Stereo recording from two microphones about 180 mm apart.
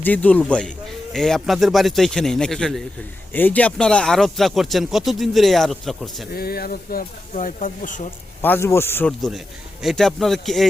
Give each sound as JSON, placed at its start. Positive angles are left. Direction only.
{"t": 0.0, "sound": "speech", "side_deg": 10}
{"t": 6.3, "sound": "speech", "side_deg": 55}
{"t": 8.4, "sound": "speech", "side_deg": 10}
{"t": 9.8, "sound": "speech", "side_deg": 0}